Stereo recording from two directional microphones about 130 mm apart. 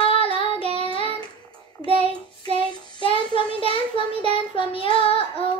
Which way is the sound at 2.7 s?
45° right (ahead or behind).